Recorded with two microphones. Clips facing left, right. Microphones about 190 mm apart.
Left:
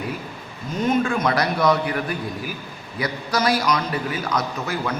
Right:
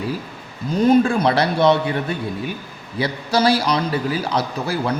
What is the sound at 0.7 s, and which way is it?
A man's voice, 35° right (ahead or behind).